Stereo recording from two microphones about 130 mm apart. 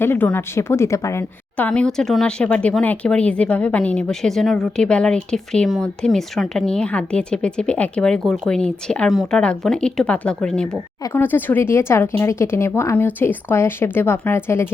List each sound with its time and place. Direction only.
0.0 s speech: 15° left (ahead or behind)
1.5 s speech: 10° left (ahead or behind)
11.0 s speech: 15° left (ahead or behind)